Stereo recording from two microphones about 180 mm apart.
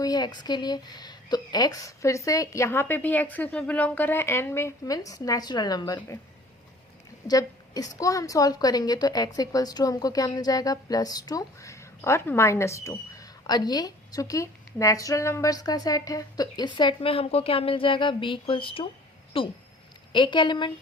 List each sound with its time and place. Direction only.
0.0 s a woman's voice: 25° left (ahead or behind)
7.3 s a woman's voice: 20° left (ahead or behind)